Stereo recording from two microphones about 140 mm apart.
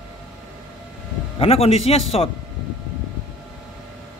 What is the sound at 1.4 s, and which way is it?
Speech, 45° left (ahead or behind).